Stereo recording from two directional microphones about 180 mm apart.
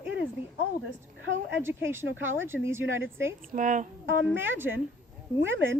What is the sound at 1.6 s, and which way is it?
Speech, 10° right (ahead or behind).